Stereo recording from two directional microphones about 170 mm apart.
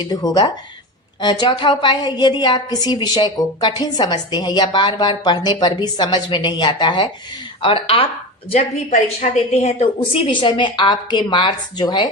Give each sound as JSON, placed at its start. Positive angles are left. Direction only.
{"t": 0.0, "sound": "a woman's voice", "side_deg": 25}